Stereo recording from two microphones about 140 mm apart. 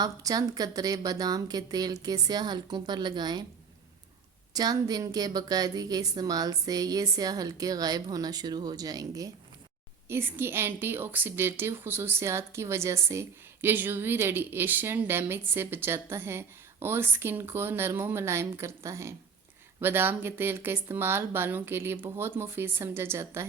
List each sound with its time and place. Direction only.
0.0 s a woman's voice: 25° right (ahead or behind)
4.5 s a woman's voice: 30° right (ahead or behind)